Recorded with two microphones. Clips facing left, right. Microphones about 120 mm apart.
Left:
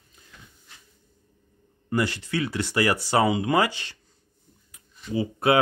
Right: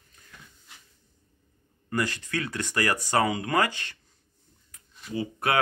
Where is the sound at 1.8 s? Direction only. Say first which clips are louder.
Left 3 dB; 20° left (ahead or behind).